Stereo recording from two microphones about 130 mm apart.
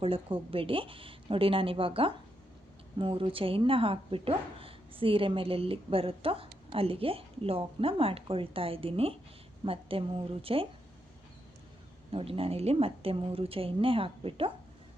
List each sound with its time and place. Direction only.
0.0 s speech: 45° right (ahead or behind)
12.1 s speech: 45° right (ahead or behind)